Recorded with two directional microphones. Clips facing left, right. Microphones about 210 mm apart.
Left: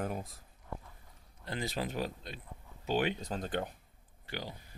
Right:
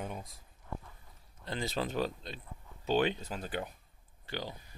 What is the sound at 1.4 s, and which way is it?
Speech, 25° right (ahead or behind).